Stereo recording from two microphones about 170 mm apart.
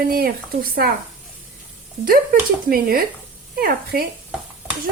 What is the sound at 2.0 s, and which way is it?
Speech, 55° right (ahead or behind).